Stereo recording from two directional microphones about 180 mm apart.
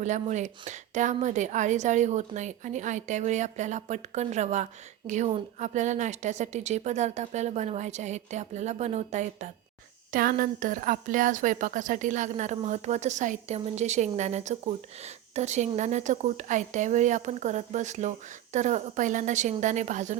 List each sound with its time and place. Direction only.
0.0 s a woman's voice: 40° right (ahead or behind)
10.1 s a woman's voice: 50° right (ahead or behind)